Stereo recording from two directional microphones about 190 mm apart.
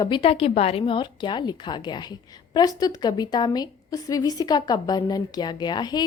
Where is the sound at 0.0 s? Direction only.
25° left (ahead or behind).